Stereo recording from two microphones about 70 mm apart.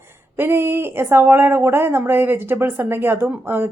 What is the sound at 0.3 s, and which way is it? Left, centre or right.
Speech, right.